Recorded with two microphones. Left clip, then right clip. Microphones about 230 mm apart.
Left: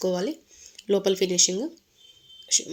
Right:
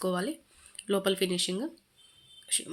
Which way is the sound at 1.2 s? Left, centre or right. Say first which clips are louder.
Left 7 dB; right.